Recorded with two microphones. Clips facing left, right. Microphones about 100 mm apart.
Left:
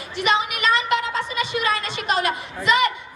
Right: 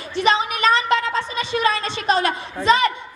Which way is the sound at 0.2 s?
30° right (ahead or behind).